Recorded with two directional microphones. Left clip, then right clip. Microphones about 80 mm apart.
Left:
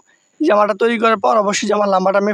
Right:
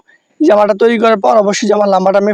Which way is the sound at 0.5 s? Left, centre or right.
Right.